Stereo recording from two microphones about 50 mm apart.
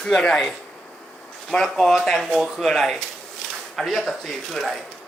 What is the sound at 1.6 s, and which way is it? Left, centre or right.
Speech, centre.